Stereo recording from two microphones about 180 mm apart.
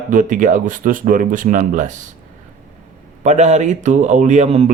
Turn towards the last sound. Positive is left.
turn(degrees=-40)  # may be behind; listen again after turning